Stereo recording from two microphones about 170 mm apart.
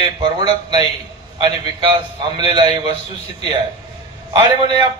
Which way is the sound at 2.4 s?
25° right (ahead or behind).